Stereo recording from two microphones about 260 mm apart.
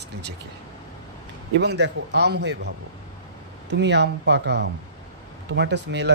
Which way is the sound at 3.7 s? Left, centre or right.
Right.